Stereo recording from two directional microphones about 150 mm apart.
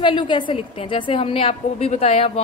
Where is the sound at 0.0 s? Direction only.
30° left (ahead or behind).